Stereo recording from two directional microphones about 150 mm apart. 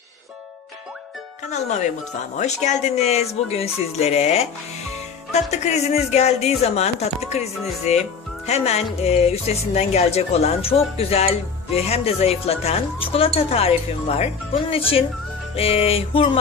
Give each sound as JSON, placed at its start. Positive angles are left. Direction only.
{"t": 1.5, "sound": "speech", "side_deg": 50}
{"t": 15.5, "sound": "music", "side_deg": 40}